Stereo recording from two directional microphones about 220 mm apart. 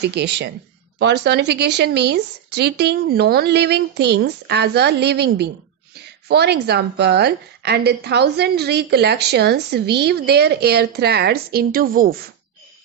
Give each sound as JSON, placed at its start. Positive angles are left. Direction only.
{"t": 0.0, "sound": "a woman's voice", "side_deg": -50}